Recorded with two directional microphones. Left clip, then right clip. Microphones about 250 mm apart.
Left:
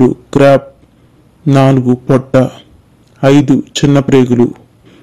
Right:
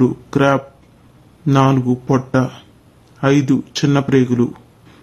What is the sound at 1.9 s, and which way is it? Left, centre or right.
Speech, centre.